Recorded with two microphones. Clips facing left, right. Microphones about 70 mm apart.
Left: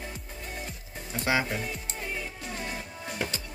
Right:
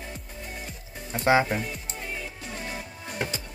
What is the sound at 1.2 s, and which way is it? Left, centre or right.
Speech, right.